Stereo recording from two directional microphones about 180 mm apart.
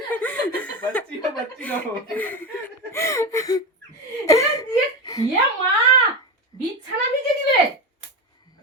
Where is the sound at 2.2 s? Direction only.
10° left (ahead or behind).